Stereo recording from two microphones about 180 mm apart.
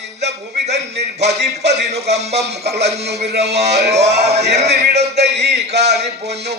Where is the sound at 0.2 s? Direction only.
70° right (ahead or behind).